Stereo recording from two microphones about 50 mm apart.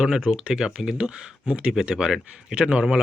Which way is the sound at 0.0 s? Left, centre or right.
Centre.